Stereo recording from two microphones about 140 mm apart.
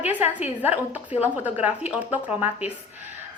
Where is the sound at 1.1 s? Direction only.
50° left (ahead or behind).